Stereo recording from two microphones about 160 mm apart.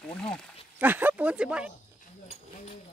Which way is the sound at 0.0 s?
5° left (ahead or behind).